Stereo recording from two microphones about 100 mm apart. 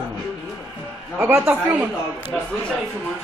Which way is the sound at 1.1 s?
10° right (ahead or behind).